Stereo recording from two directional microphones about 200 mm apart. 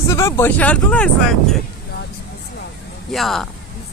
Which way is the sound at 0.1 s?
15° left (ahead or behind).